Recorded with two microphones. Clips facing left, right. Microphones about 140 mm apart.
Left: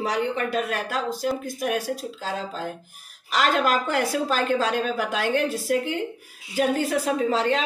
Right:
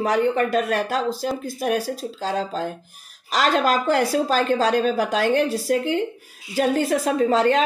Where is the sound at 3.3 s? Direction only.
35° right (ahead or behind).